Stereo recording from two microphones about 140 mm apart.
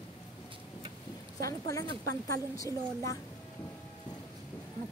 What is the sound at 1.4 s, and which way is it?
A woman's voice, 25° left (ahead or behind).